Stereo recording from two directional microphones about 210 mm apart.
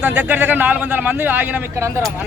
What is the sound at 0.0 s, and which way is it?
A man's voice, 5° right (ahead or behind).